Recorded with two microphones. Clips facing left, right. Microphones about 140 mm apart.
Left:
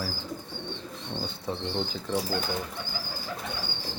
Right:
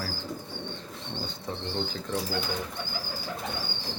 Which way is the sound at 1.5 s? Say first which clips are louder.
Left 3 dB; 15° left (ahead or behind).